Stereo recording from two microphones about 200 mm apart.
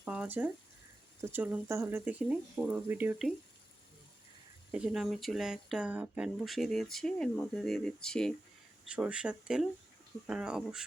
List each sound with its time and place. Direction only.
0.0 s speech: 5° right (ahead or behind)
4.7 s speech: 5° right (ahead or behind)